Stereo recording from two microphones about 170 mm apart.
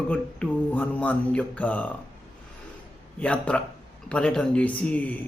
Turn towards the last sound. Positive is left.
turn(degrees=10)  # may be behind; listen again after turning